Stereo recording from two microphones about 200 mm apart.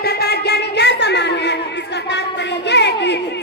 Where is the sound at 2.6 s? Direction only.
60° left (ahead or behind).